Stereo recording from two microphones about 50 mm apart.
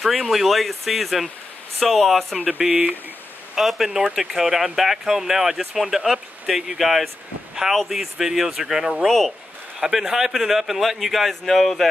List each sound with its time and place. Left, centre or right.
0.0 s a man's voice: centre
2.6 s speech: right
3.5 s speech: centre
9.0 s a man's voice: centre
9.8 s a man's voice: centre